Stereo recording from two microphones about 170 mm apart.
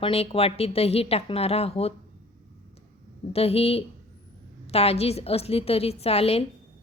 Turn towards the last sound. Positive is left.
turn(degrees=35)  # may be behind; listen again after turning